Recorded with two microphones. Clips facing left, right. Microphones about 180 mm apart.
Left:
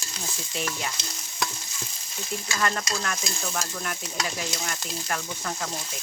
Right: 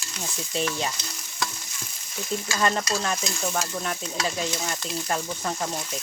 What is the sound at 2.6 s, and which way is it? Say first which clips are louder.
Stir: right 3 dB; 25° right (ahead or behind).